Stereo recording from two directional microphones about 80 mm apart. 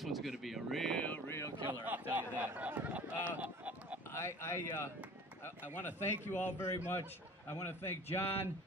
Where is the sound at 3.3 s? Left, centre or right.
Centre.